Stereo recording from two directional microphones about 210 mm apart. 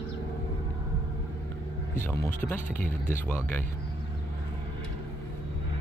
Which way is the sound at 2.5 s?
40° left (ahead or behind).